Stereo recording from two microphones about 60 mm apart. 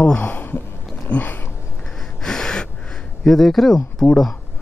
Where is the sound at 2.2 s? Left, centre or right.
Centre.